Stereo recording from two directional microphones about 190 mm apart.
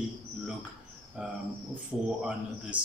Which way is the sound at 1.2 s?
5° right (ahead or behind).